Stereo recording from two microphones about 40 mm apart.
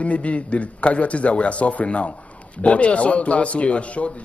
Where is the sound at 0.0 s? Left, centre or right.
Left.